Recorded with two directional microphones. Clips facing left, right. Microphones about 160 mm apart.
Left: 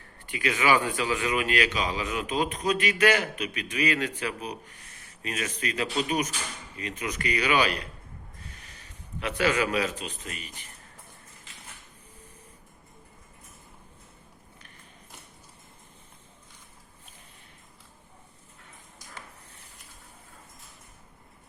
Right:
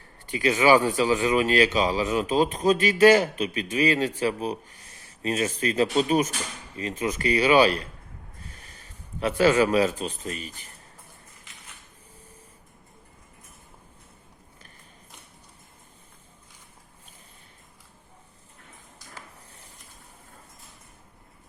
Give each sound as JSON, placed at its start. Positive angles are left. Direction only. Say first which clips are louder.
{"t": 0.3, "sound": "speech", "louder": "right 5 dB", "side_deg": -35}
{"t": 9.2, "sound": "speech", "louder": "right 6 dB", "side_deg": -35}